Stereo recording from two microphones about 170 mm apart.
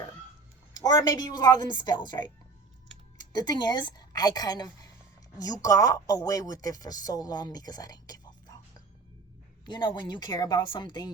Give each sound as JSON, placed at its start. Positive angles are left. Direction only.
{"t": 0.8, "sound": "a woman's voice", "side_deg": 20}
{"t": 9.6, "sound": "a woman's voice", "side_deg": 25}